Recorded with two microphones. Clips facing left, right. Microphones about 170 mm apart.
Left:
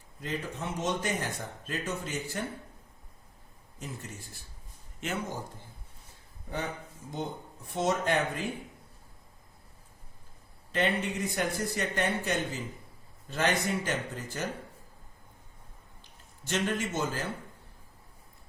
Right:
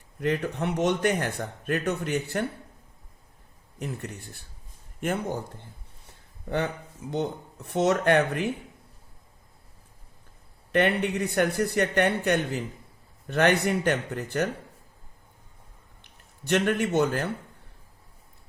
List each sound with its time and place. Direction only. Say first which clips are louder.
0.2 s speech: right 9 dB; 65° right (ahead or behind)
3.8 s speech: right 7 dB; 65° right (ahead or behind)
7.1 s speech: right 7 dB; 70° right (ahead or behind)
10.7 s speech: right 6 dB; 65° right (ahead or behind)
16.5 s speech: right 7 dB; 65° right (ahead or behind)